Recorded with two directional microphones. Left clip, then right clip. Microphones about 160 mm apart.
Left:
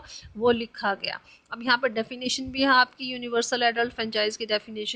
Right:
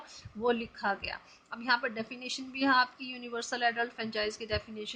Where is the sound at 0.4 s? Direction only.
55° left (ahead or behind).